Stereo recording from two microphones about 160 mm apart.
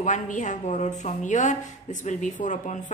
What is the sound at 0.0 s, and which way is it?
Speech, 50° left (ahead or behind).